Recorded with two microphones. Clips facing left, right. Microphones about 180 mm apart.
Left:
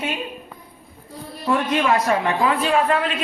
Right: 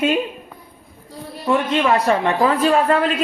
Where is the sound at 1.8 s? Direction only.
35° right (ahead or behind).